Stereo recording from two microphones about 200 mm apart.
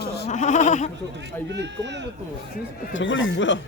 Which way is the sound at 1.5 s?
60° right (ahead or behind).